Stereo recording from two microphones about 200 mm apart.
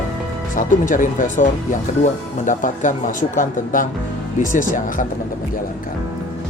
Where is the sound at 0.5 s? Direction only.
40° left (ahead or behind).